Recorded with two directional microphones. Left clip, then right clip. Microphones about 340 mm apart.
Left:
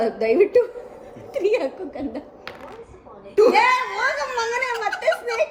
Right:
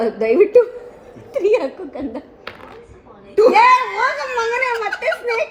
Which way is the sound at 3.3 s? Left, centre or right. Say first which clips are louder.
Right 5 dB; centre.